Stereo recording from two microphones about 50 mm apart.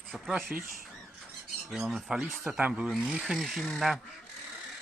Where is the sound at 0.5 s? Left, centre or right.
Right.